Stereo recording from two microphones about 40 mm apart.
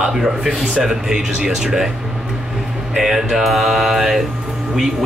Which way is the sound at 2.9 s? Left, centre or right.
Centre.